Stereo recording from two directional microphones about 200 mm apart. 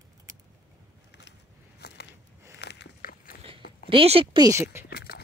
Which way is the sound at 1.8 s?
55° left (ahead or behind).